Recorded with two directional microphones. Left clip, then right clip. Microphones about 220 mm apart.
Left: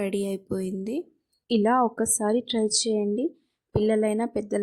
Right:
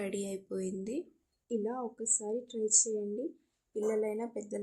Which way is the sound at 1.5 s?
45° left (ahead or behind).